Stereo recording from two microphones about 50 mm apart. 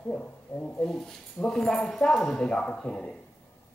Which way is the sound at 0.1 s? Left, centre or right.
Centre.